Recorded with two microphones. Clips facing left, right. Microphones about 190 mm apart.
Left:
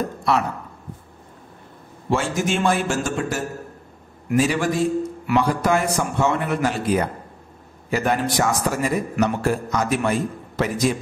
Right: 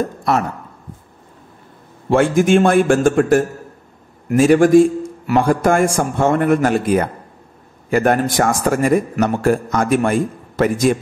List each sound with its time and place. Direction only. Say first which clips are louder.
0.2 s speech: right 2 dB; 45° right (ahead or behind)
2.0 s a man's voice: right 9 dB; 55° right (ahead or behind)